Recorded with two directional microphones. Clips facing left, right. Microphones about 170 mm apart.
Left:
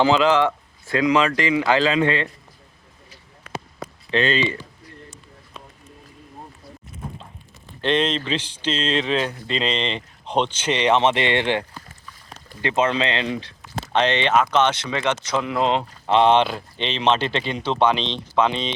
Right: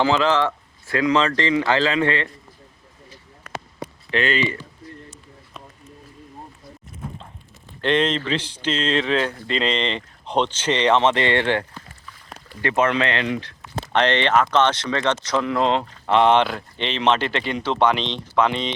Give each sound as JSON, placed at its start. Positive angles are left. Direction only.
{"t": 0.0, "sound": "speech", "side_deg": 15}
{"t": 4.1, "sound": "speech", "side_deg": 20}
{"t": 7.8, "sound": "speech", "side_deg": 20}
{"t": 12.6, "sound": "speech", "side_deg": 20}